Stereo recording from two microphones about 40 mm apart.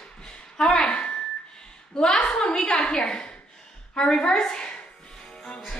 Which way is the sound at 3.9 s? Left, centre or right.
Left.